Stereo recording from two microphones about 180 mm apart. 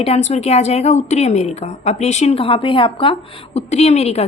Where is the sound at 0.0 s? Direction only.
35° left (ahead or behind).